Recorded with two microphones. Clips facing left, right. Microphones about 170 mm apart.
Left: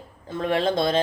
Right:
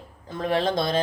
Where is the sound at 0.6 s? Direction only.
25° left (ahead or behind).